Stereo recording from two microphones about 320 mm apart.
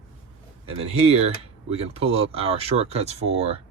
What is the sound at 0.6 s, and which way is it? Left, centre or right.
Speech, centre.